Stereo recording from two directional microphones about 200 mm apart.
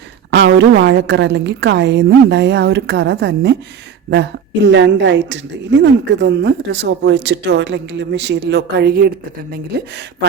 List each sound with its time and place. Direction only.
0.3 s a woman's voice: 60° right (ahead or behind)